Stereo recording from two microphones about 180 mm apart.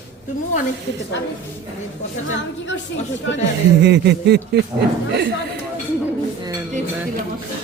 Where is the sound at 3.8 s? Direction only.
70° right (ahead or behind).